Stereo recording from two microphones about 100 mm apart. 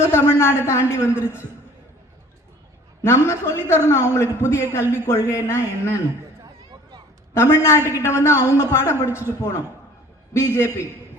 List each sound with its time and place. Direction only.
0.0 s a man's voice: 25° left (ahead or behind)
3.0 s a man's voice: 25° left (ahead or behind)
6.4 s a sound: 40° right (ahead or behind)
7.3 s a man's voice: 25° left (ahead or behind)